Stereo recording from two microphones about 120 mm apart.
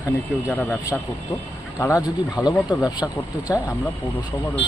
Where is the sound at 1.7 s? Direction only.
25° left (ahead or behind).